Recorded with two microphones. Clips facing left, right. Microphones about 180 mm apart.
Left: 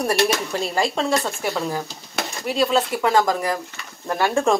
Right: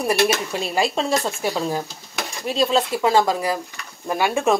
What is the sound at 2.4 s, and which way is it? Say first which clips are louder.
Speech: even; 20° right (ahead or behind).